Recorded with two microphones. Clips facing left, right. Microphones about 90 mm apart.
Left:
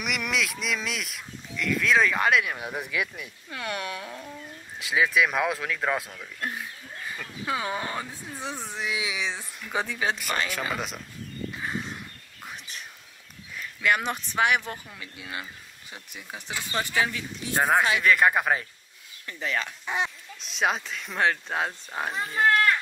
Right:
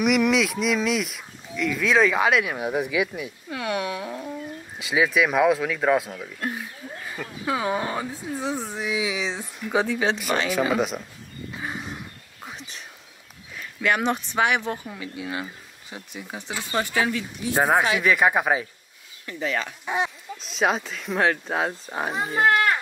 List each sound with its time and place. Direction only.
0.0 s speech: centre (ahead or behind)
3.4 s speech: 15° right (ahead or behind)
4.7 s speech: centre (ahead or behind)
10.0 s speech: centre (ahead or behind)
11.5 s a sound: 15° right (ahead or behind)
13.6 s a sound: 10° right (ahead or behind)
14.1 s speech: 10° right (ahead or behind)
14.6 s speech: 20° right (ahead or behind)
15.0 s speech: 5° right (ahead or behind)
16.3 s speech: 20° right (ahead or behind)
19.2 s speech: 15° right (ahead or behind)
20.4 s speech: centre (ahead or behind)